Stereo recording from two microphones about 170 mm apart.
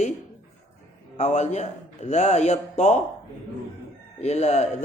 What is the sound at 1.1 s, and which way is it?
A man's voice, 40° left (ahead or behind).